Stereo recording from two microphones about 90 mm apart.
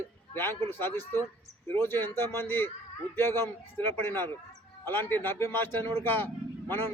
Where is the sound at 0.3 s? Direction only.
25° left (ahead or behind).